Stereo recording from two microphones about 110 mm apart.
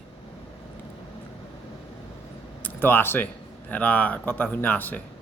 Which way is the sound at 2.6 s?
20° left (ahead or behind).